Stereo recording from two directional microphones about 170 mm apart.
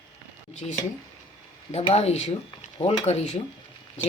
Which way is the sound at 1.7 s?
35° left (ahead or behind).